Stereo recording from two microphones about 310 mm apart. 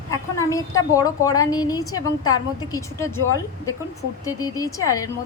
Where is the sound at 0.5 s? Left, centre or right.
Centre.